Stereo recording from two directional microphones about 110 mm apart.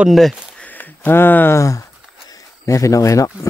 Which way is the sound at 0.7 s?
20° left (ahead or behind).